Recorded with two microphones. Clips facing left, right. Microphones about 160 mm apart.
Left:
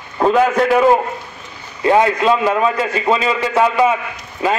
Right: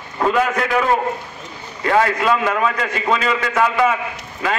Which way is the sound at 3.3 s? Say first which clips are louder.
Left 3 dB; 30° left (ahead or behind).